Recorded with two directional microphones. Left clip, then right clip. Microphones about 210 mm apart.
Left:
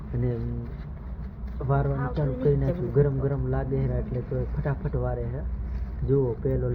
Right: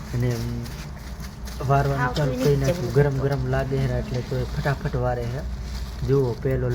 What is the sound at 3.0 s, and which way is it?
Speech, 10° right (ahead or behind).